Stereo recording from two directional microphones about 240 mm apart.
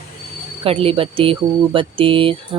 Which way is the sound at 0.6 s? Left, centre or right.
Right.